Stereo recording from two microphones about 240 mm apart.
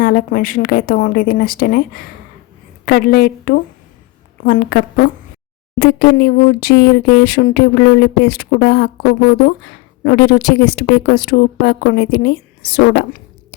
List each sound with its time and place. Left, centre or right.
0.0 s a woman's voice: left